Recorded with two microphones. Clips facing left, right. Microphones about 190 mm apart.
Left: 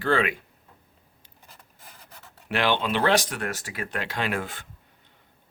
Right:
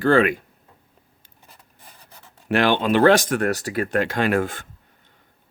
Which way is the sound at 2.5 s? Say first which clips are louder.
Right 6 dB; 45° right (ahead or behind).